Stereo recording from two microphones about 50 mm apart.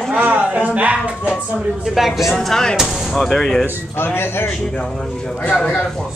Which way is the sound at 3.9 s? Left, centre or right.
Left.